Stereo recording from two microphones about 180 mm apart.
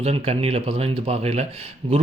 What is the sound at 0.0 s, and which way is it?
Speech, 35° right (ahead or behind).